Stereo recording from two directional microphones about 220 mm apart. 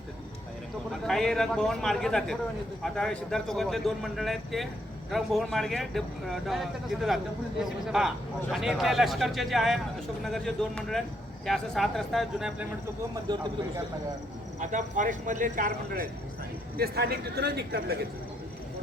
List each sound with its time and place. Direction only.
1.0 s a man's voice: centre (ahead or behind)
13.2 s speech: 20° right (ahead or behind)
14.6 s a man's voice: 35° right (ahead or behind)